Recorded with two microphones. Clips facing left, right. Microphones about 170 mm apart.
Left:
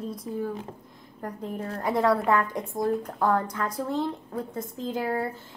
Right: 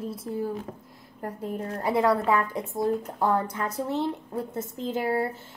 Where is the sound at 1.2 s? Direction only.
30° right (ahead or behind).